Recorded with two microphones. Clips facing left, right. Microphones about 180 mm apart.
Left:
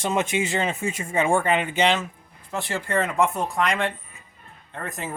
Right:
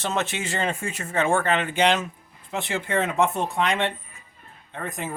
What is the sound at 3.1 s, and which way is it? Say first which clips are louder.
Speech: even; 25° right (ahead or behind).